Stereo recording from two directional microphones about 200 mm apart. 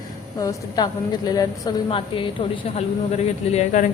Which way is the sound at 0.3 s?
20° left (ahead or behind).